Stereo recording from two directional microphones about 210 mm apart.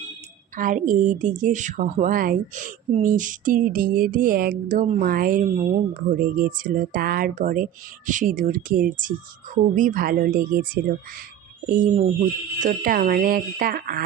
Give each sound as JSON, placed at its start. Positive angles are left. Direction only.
{"t": 0.5, "sound": "a woman's voice", "side_deg": -40}